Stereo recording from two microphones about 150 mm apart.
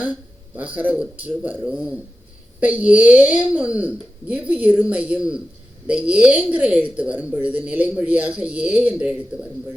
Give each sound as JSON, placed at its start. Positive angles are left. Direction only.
{"t": 0.5, "sound": "speech", "side_deg": -10}